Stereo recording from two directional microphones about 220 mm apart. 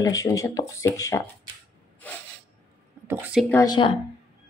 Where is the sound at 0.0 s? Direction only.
15° left (ahead or behind).